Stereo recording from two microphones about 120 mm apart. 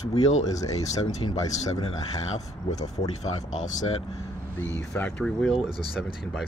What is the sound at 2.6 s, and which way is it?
Speech, 70° left (ahead or behind).